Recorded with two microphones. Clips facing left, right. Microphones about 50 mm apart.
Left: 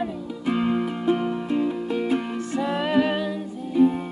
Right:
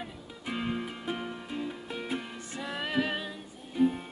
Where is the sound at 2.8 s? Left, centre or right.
Centre.